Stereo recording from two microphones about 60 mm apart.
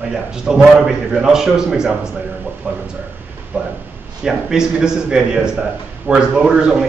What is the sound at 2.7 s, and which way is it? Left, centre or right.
Speech, right.